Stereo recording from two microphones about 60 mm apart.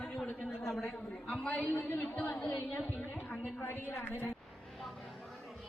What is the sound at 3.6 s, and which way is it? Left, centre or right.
Speech, left.